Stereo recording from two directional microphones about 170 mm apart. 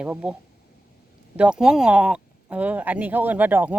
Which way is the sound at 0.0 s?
10° right (ahead or behind).